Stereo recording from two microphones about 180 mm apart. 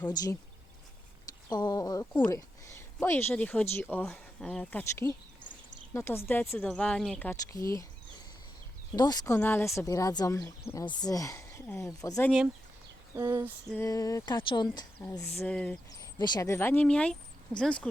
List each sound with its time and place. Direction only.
1.5 s speech: 25° left (ahead or behind); by 7.3 s 5° left (ahead or behind)
7.5 s speech: 20° left (ahead or behind)
9.0 s speech: 20° left (ahead or behind)
13.1 s a sound: 15° right (ahead or behind)
13.8 s speech: 20° left (ahead or behind)
15.9 s speech: 20° left (ahead or behind); by 17.8 s 5° left (ahead or behind)